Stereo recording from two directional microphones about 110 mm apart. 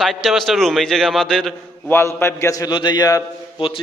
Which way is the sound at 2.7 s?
45° left (ahead or behind).